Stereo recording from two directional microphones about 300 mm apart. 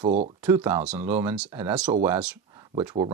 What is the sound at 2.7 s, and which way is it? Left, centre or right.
Speech, right.